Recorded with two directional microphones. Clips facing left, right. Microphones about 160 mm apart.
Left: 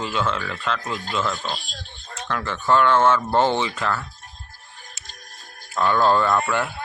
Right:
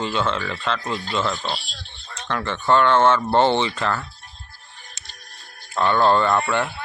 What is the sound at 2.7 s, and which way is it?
Speech, 5° left (ahead or behind).